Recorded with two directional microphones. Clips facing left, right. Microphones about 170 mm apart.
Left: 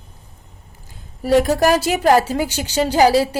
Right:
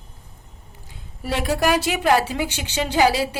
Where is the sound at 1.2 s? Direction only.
40° left (ahead or behind).